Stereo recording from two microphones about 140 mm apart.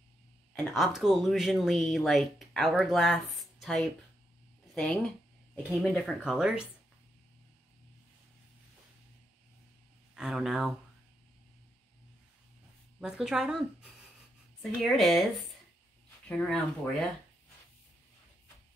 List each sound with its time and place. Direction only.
0.7 s speech: centre (ahead or behind)
5.7 s speech: 5° left (ahead or behind)
10.1 s speech: 5° right (ahead or behind)
13.0 s speech: 5° right (ahead or behind)